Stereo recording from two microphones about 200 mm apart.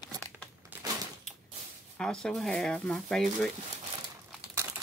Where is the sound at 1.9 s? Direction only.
5° left (ahead or behind).